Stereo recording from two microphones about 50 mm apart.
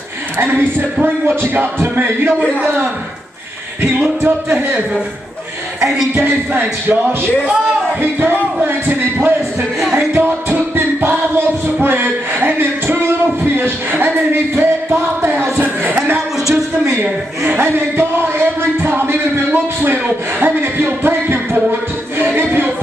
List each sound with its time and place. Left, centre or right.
0.4 s music: right
1.5 s speech: right
5.8 s speech: centre
6.1 s speech: right
8.0 s music: right
8.6 s a sound: right
9.6 s a sound: centre
10.1 s music: right
16.8 s a woman's voice: right
17.5 s music: right
22.2 s a sound: right